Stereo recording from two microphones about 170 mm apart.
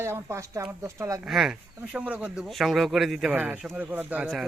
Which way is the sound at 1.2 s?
Centre (ahead or behind).